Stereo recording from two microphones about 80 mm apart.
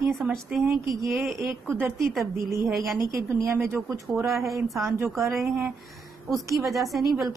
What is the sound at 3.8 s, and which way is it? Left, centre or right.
Speech, right.